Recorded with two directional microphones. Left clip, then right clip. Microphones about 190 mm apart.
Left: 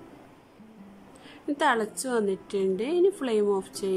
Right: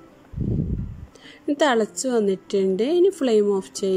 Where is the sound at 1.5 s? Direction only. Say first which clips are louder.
Right 5 dB; 20° right (ahead or behind).